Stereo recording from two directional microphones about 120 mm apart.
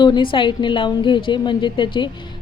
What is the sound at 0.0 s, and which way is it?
A woman's voice, 40° left (ahead or behind).